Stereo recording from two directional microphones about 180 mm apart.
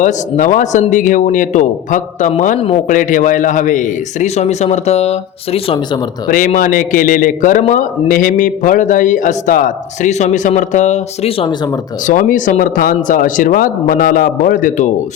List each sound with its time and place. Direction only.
0.0 s a man's voice: 45° left (ahead or behind)
6.2 s a man's voice: 50° left (ahead or behind); by 11.7 s 30° left (ahead or behind)
12.0 s a man's voice: 50° left (ahead or behind)